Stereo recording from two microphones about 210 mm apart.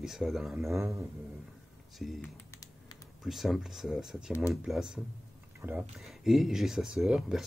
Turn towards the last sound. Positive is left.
turn(degrees=0)  # may be behind; listen again after turning